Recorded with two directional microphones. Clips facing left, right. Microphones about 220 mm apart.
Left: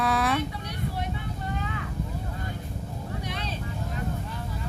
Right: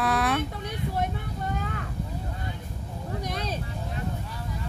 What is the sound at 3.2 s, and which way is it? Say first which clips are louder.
Vehicle: right 5 dB; 40° right (ahead or behind).